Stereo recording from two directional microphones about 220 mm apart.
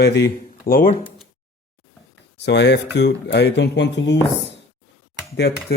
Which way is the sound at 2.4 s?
50° left (ahead or behind).